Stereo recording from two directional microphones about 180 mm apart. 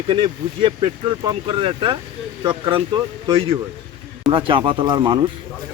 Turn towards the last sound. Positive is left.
turn(degrees=-25)  # may be behind; listen again after turning